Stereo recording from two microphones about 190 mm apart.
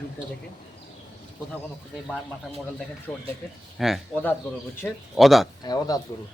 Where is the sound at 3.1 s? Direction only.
10° left (ahead or behind).